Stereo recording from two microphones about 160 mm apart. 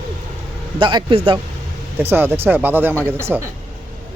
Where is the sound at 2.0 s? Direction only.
15° right (ahead or behind).